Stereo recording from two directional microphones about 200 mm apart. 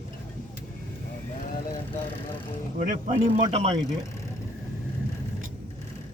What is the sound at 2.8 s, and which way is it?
Speech, 35° right (ahead or behind).